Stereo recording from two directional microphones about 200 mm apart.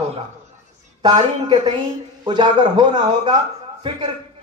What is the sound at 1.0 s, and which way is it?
A man's voice, 25° right (ahead or behind).